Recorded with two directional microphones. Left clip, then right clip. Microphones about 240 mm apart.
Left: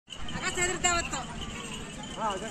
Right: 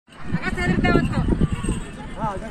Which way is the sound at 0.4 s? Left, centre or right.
Left.